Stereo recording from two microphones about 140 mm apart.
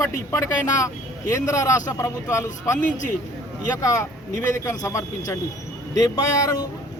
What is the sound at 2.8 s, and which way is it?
Speech, 60° left (ahead or behind).